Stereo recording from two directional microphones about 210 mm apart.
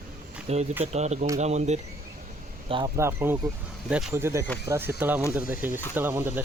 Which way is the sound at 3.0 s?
10° right (ahead or behind).